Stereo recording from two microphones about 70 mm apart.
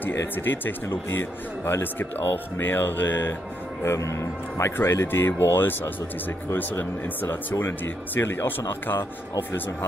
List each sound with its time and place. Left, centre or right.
0.4 s speech: left
3.8 s speech: left